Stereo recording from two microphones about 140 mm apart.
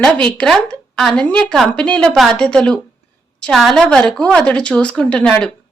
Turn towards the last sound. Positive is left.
turn(degrees=5)  # may be behind; listen again after turning